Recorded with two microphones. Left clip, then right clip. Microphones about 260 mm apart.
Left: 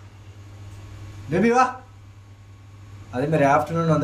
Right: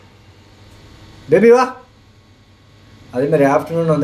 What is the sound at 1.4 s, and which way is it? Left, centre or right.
Speech, centre.